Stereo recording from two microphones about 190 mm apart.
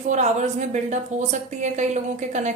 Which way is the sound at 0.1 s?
35° right (ahead or behind).